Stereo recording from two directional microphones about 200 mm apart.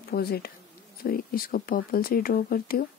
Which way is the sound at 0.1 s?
50° left (ahead or behind).